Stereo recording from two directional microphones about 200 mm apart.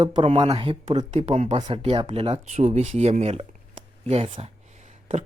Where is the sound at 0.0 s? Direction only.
25° right (ahead or behind).